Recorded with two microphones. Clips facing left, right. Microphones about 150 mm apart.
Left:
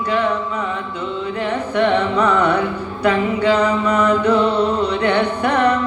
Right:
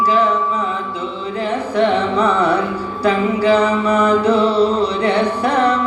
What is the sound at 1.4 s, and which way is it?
Carnatic music, 30° right (ahead or behind).